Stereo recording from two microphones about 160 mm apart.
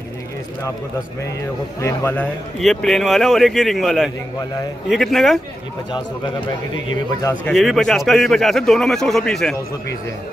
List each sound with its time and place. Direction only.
1.8 s a man's voice: 15° left (ahead or behind)
2.6 s a man's voice: 5° left (ahead or behind)
5.9 s speech: 30° left (ahead or behind)
7.4 s a man's voice: centre (ahead or behind)